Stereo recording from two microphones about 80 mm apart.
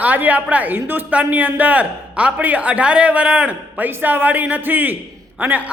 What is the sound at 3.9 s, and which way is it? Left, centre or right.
Speech, right.